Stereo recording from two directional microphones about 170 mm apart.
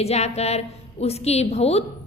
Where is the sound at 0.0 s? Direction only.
40° left (ahead or behind).